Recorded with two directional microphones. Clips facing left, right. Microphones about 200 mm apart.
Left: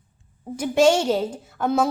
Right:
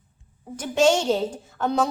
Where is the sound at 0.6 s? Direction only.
10° left (ahead or behind).